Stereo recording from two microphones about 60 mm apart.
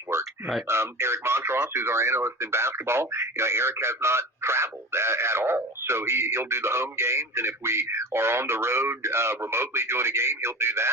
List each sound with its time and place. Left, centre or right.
0.1 s a sound: right
0.7 s radio: right
1.7 s speech: right